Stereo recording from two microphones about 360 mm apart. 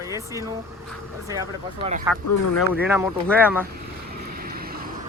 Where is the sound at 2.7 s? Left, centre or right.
Centre.